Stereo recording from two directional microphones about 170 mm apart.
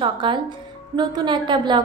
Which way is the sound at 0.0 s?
30° right (ahead or behind).